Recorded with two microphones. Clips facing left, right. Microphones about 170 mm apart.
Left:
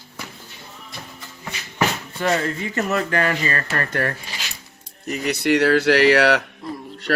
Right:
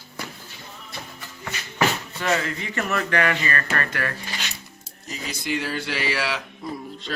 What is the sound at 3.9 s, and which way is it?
Speech, 45° left (ahead or behind).